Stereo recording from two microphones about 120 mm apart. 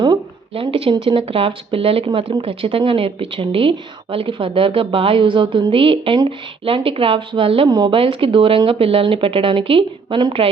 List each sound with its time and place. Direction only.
0.0 s speech: 45° right (ahead or behind)